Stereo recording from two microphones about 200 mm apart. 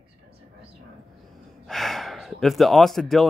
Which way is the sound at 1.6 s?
Centre (ahead or behind).